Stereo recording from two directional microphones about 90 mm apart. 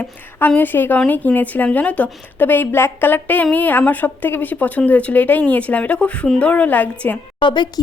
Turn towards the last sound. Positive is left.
turn(degrees=60)  # may be behind; listen again after turning